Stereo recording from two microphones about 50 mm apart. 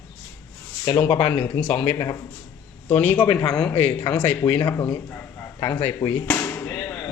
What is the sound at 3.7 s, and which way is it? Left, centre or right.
Speech, left.